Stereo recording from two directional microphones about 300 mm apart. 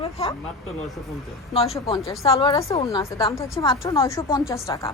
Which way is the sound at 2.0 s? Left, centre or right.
Centre.